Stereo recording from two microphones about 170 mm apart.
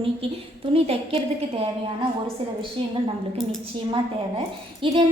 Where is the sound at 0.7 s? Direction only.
35° right (ahead or behind).